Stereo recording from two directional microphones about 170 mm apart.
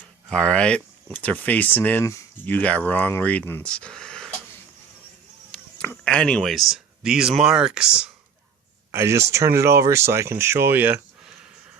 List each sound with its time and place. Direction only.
0.3 s speech: 5° left (ahead or behind)
5.5 s speech: 10° left (ahead or behind)
8.9 s speech: 15° right (ahead or behind)